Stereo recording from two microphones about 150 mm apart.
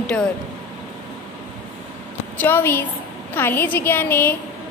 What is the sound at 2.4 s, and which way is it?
A woman's voice, 15° left (ahead or behind).